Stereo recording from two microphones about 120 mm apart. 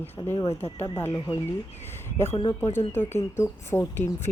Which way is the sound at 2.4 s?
35° left (ahead or behind).